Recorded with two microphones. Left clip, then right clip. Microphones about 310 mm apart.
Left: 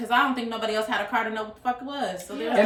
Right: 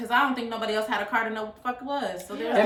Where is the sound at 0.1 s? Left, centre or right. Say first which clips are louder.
Left 1 dB; centre.